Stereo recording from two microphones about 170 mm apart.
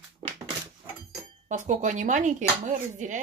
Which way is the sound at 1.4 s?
45° right (ahead or behind).